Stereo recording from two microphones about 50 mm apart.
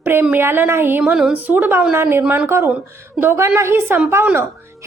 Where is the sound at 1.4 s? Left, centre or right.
Right.